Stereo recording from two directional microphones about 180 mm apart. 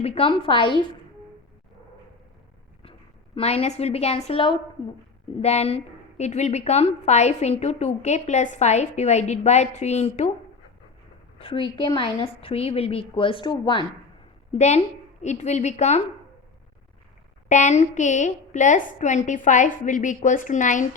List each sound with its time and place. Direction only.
0.0 s a woman's voice: 30° left (ahead or behind)
3.3 s a woman's voice: 35° left (ahead or behind)
11.3 s a woman's voice: 30° left (ahead or behind)
14.5 s a woman's voice: 40° left (ahead or behind)
17.5 s a woman's voice: 40° left (ahead or behind)